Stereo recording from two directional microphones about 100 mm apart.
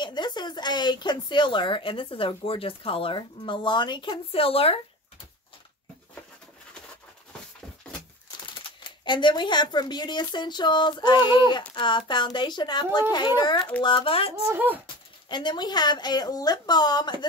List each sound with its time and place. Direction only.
0.0 s speech: 45° left (ahead or behind)
4.3 s speech: 70° left (ahead or behind)
8.6 s speech: 50° left (ahead or behind)
13.8 s speech: 60° left (ahead or behind)
14.5 s speech: 20° right (ahead or behind)
15.2 s speech: 50° left (ahead or behind)